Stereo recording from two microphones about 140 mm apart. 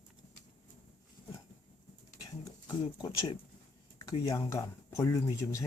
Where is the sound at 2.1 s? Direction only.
25° left (ahead or behind).